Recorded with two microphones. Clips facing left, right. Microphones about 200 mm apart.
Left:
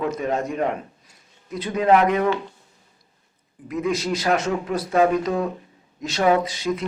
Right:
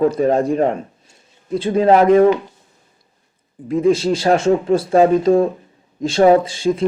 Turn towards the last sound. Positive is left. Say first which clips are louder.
# right 7 dB
turn(degrees=-30)  # may be behind; listen again after turning